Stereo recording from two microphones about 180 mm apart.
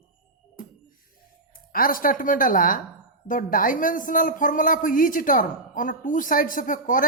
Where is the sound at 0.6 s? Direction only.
50° left (ahead or behind).